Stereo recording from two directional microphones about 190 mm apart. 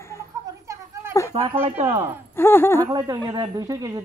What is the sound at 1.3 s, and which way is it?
Speech, 30° right (ahead or behind).